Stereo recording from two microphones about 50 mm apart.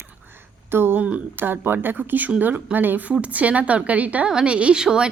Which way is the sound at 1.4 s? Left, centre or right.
Right.